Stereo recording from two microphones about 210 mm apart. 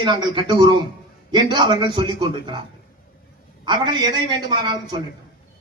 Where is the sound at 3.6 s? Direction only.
20° right (ahead or behind).